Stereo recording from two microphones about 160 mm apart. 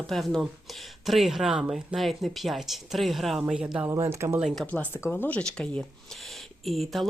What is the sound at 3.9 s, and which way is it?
Speech, 20° right (ahead or behind).